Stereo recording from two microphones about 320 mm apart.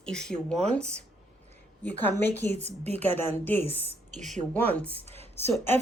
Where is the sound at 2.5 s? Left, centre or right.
Centre.